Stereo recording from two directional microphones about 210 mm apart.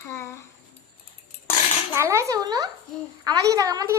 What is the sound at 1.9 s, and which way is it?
A woman's voice, 15° right (ahead or behind).